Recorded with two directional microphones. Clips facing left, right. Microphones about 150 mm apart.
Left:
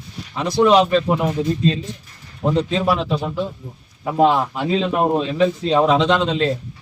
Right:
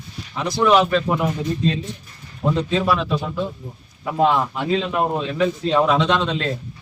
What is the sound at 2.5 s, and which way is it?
Speech, 30° left (ahead or behind).